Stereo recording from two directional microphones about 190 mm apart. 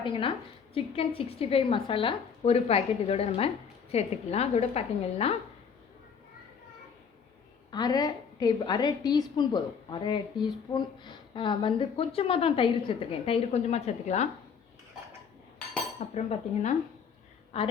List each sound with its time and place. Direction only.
0.0 s a woman's voice: 30° left (ahead or behind)
7.7 s a woman's voice: 20° left (ahead or behind); by 14.3 s 35° left (ahead or behind)
16.0 s a woman's voice: 40° left (ahead or behind)